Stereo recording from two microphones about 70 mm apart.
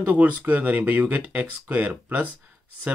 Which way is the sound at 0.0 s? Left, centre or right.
Right.